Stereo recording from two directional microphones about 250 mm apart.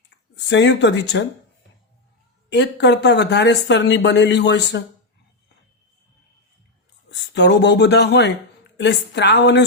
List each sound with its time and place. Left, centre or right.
0.4 s speech: left
2.5 s speech: left
7.1 s speech: left